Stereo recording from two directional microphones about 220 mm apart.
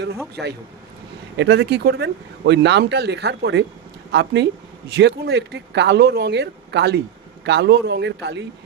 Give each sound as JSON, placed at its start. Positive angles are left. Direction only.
{"t": 0.4, "sound": "speech", "side_deg": 0}
{"t": 1.4, "sound": "speech", "side_deg": -50}